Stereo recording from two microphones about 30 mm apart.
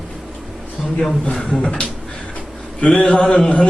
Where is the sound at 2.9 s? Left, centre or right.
Left.